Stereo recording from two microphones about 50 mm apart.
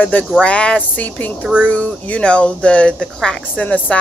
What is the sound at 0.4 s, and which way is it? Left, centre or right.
A woman's voice, left.